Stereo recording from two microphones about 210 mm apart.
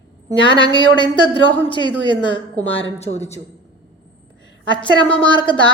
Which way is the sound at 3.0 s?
30° left (ahead or behind).